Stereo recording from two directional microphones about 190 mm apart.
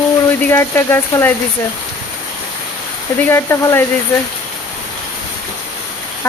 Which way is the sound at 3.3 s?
10° left (ahead or behind).